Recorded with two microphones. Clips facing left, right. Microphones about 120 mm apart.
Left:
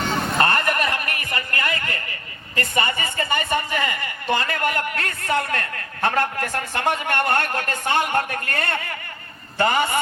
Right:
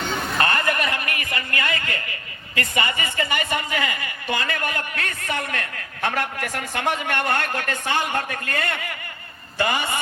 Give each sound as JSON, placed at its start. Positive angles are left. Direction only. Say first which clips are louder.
{"t": 0.0, "sound": "a sound", "louder": "left 3 dB", "side_deg": 40}
{"t": 2.6, "sound": "a woman's voice", "louder": "left 1 dB", "side_deg": 35}
{"t": 8.1, "sound": "a woman's voice", "louder": "left 3 dB", "side_deg": 45}